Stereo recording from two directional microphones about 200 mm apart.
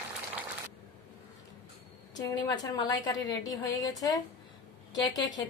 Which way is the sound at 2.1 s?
20° left (ahead or behind).